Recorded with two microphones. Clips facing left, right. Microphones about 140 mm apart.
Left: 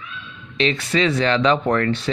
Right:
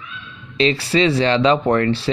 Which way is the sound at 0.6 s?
30° right (ahead or behind).